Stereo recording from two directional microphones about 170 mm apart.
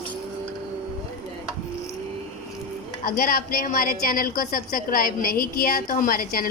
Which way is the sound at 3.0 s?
60° left (ahead or behind).